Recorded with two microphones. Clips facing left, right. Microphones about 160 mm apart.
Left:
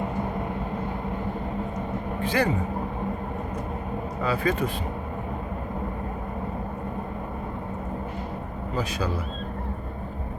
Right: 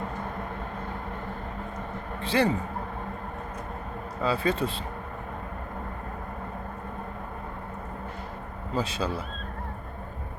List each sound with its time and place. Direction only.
2.2 s speech: 30° right (ahead or behind)
4.2 s speech: 30° right (ahead or behind)
8.7 s speech: 30° right (ahead or behind)